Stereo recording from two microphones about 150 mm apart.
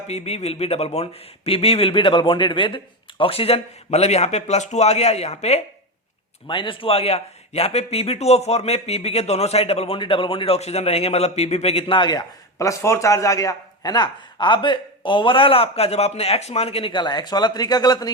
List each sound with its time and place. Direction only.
0.1 s a man's voice: 45° left (ahead or behind)
6.5 s a man's voice: 35° left (ahead or behind)